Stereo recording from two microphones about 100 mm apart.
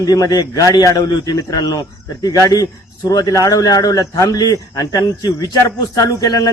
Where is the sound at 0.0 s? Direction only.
40° left (ahead or behind).